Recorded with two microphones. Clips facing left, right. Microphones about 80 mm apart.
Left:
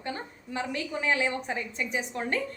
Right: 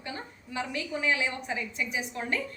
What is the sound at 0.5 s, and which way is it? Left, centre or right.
A woman's voice, left.